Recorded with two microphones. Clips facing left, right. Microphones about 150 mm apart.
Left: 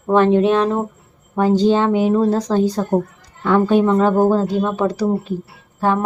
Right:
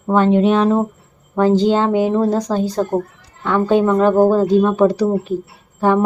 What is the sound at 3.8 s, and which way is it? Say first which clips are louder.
Speech: right 1 dB; 15° left (ahead or behind).